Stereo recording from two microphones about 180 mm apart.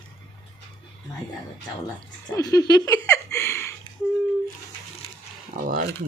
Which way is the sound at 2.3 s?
20° left (ahead or behind).